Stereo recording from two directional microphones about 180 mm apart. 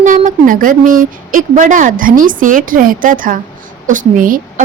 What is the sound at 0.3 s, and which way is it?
Speech, 50° right (ahead or behind).